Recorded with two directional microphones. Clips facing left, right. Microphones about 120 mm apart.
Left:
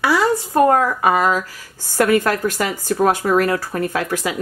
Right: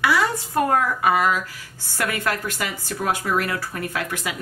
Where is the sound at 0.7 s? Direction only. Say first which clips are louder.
Left 4 dB; 35° left (ahead or behind).